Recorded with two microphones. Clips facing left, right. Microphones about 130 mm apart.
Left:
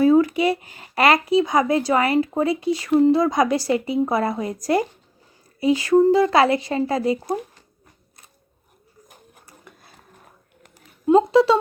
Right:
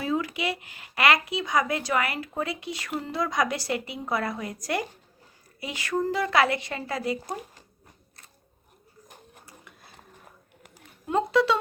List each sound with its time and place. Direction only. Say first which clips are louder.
0.0 s a sound: left 13 dB; 40° left (ahead or behind)
0.3 s speech: left 10 dB; 40° left (ahead or behind)
11.0 s speech: left 8 dB; 30° left (ahead or behind)